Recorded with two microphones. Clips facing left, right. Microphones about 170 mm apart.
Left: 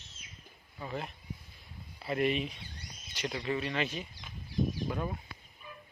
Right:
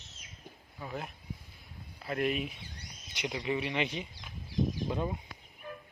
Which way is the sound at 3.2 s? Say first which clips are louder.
Right 1 dB; 15° right (ahead or behind).